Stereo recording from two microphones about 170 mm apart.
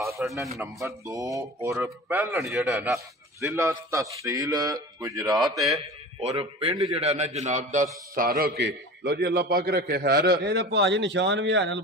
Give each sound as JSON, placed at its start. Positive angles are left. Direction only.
{"t": 0.2, "sound": "a man's voice", "side_deg": 0}
{"t": 0.8, "sound": "a man's voice", "side_deg": -20}
{"t": 2.9, "sound": "speech", "side_deg": -15}
{"t": 6.1, "sound": "a man's voice", "side_deg": -35}
{"t": 8.1, "sound": "a man's voice", "side_deg": -60}